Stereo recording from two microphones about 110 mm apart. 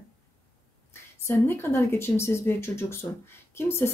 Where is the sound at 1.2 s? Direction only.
25° left (ahead or behind).